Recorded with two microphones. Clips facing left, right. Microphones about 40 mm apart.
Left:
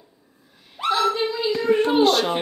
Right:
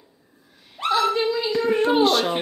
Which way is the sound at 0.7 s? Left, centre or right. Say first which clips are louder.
Even; centre.